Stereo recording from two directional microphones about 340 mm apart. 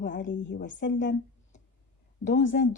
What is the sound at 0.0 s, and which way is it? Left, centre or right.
A woman's voice, left.